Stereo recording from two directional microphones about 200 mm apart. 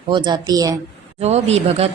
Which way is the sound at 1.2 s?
35° right (ahead or behind).